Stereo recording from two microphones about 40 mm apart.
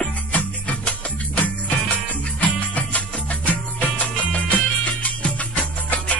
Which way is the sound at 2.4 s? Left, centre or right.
Left.